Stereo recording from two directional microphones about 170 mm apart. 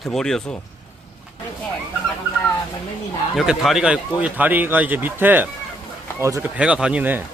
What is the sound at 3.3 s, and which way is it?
Speech, centre (ahead or behind).